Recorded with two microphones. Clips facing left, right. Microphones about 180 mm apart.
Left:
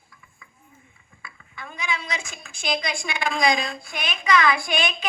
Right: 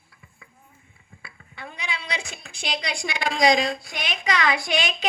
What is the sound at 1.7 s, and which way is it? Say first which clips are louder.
A woman's voice: left 3 dB; 35° right (ahead or behind).